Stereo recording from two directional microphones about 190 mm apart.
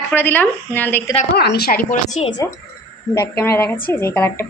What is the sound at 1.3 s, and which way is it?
A woman's voice, 55° left (ahead or behind).